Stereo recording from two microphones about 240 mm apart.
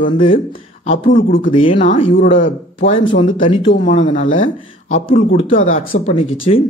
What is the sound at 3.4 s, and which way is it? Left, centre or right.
Speech, left.